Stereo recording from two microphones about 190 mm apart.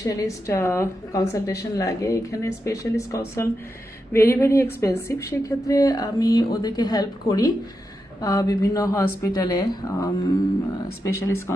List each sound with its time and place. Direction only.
0.0 s a woman's voice: 15° left (ahead or behind)